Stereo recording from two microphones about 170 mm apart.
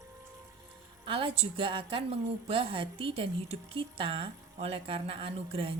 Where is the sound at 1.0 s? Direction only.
30° right (ahead or behind).